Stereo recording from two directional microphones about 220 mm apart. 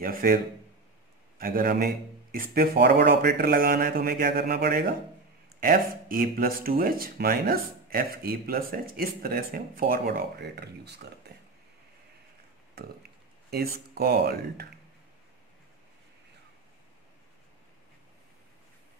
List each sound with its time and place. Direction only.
0.0 s speech: 40° right (ahead or behind)
1.4 s speech: 40° right (ahead or behind)
13.9 s speech: 45° right (ahead or behind)